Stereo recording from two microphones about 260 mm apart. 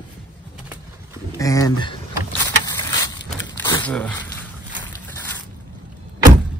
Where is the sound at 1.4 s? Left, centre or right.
Centre.